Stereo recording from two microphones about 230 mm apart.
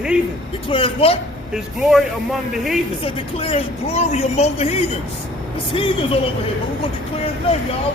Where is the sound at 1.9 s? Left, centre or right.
Centre.